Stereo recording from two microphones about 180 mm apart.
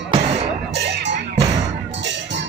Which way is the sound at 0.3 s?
65° right (ahead or behind).